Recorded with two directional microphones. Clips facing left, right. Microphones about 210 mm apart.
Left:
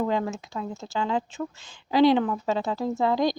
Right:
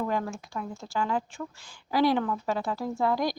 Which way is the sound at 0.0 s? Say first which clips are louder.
Left 4 dB; 20° left (ahead or behind).